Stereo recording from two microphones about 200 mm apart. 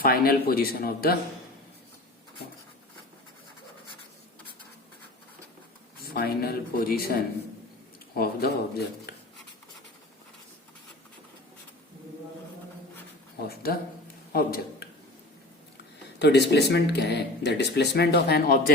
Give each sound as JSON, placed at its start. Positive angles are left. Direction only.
{"t": 0.0, "sound": "speech", "side_deg": 50}
{"t": 6.1, "sound": "speech", "side_deg": 50}
{"t": 13.5, "sound": "speech", "side_deg": 50}
{"t": 16.1, "sound": "speech", "side_deg": 55}